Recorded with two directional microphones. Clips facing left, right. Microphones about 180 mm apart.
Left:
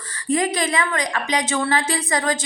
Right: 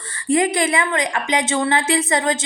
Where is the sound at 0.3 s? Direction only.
25° right (ahead or behind).